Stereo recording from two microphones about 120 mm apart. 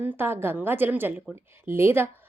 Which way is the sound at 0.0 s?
20° right (ahead or behind).